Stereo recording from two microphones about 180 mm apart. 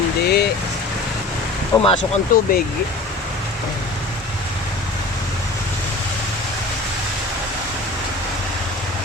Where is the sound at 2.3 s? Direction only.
55° left (ahead or behind).